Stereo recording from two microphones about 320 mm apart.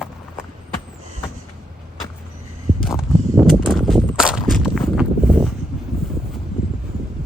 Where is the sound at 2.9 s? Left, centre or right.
Centre.